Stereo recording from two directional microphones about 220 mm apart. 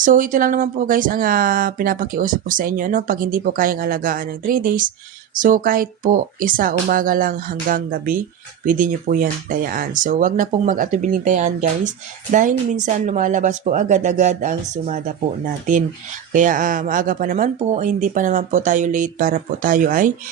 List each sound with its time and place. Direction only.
0.0 s speech: 35° right (ahead or behind)
16.3 s speech: 35° right (ahead or behind)